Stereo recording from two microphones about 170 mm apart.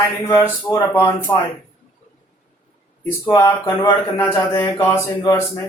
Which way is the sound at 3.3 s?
20° left (ahead or behind).